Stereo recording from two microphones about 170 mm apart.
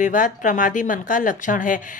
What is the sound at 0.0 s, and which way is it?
Speech, 50° left (ahead or behind).